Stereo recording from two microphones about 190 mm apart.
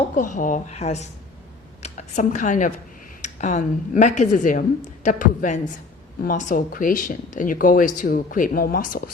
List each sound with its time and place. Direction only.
0.2 s a woman's voice: 45° left (ahead or behind)